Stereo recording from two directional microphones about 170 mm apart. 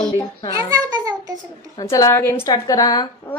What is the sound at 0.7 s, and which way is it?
Speech, 20° right (ahead or behind).